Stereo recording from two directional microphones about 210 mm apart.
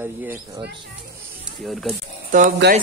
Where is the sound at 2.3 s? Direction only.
40° right (ahead or behind).